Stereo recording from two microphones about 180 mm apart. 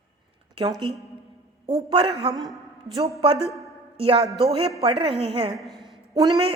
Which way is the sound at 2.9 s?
30° right (ahead or behind).